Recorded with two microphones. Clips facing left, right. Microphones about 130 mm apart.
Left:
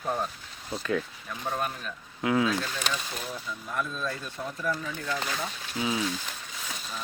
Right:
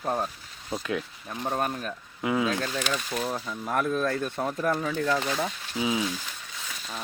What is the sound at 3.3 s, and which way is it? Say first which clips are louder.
Speech: right 5 dB; 65° right (ahead or behind).